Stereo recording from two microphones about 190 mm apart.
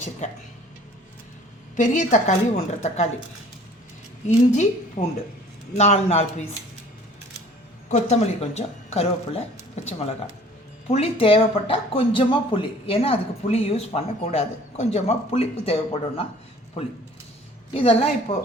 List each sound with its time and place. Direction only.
0.2 s speech: 40° left (ahead or behind)
1.7 s speech: 40° left (ahead or behind)
4.3 s speech: 40° left (ahead or behind)
7.9 s speech: 35° left (ahead or behind)
10.8 s speech: 30° left (ahead or behind)